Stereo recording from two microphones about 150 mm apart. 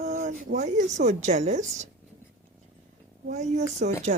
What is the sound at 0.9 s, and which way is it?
Speech, 50° right (ahead or behind).